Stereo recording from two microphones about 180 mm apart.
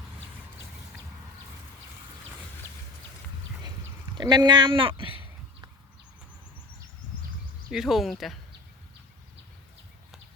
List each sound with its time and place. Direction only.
4.2 s speech: 25° right (ahead or behind)
7.7 s speech: centre (ahead or behind)